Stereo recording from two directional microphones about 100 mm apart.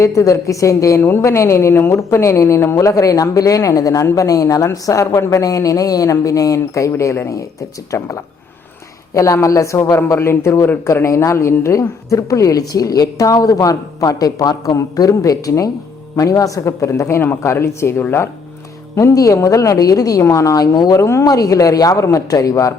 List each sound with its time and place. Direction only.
0.0 s a woman's voice: 30° left (ahead or behind)